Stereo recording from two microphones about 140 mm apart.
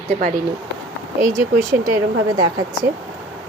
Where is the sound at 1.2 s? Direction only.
20° right (ahead or behind).